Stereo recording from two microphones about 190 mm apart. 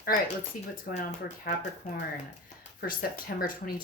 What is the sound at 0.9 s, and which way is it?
Speech, 40° left (ahead or behind).